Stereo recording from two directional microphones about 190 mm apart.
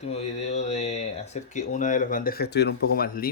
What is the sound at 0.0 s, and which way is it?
Speech, 35° left (ahead or behind).